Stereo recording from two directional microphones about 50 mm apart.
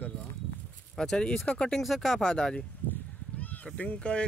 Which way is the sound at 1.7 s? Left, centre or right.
Centre.